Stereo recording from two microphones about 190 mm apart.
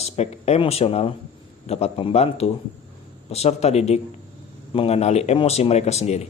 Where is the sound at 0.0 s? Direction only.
35° left (ahead or behind).